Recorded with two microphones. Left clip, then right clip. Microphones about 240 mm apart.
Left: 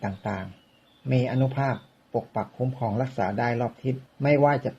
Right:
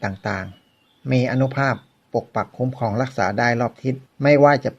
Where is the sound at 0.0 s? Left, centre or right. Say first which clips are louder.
Right 6 dB; right.